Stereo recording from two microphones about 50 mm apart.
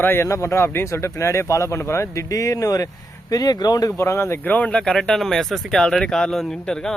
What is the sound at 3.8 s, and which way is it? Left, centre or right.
Speech, left.